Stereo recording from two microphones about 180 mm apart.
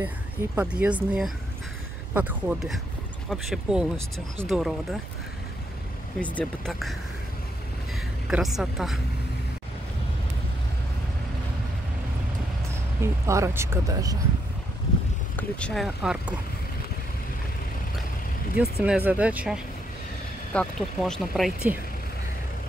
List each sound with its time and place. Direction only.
0.6 s speech: 5° right (ahead or behind)
6.2 s a woman's voice: 5° left (ahead or behind)
13.0 s speech: 15° right (ahead or behind)
15.3 s speech: 5° left (ahead or behind)
18.6 s speech: 5° right (ahead or behind)